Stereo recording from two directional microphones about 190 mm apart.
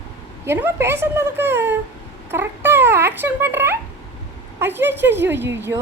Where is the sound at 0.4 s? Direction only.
15° right (ahead or behind).